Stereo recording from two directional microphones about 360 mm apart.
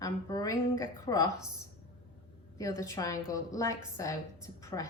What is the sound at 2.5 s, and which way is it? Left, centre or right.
A woman's voice, centre.